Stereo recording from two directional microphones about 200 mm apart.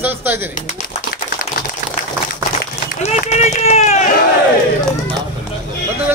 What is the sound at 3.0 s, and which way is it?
Run, 35° left (ahead or behind).